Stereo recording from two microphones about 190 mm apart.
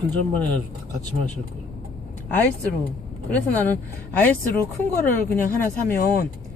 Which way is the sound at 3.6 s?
10° left (ahead or behind).